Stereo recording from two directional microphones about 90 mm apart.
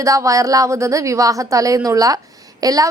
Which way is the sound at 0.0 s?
35° right (ahead or behind).